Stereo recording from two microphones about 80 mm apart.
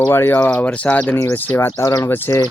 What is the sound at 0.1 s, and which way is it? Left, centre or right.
Speech, left.